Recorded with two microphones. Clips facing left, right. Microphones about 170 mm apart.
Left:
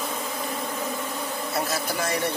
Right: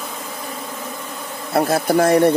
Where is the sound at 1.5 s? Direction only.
55° right (ahead or behind).